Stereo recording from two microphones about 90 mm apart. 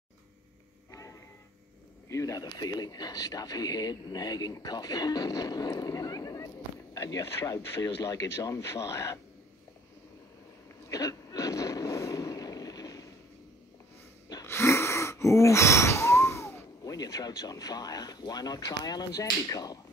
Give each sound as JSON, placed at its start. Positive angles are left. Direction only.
{"t": 2.0, "sound": "speech", "side_deg": 35}
{"t": 10.9, "sound": "a sound", "side_deg": 40}
{"t": 14.4, "sound": "wheeze", "side_deg": 30}
{"t": 16.8, "sound": "speech", "side_deg": 45}